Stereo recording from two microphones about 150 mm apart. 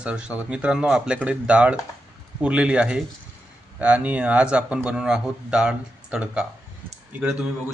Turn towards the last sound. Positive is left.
turn(degrees=-5)  # may be behind; listen again after turning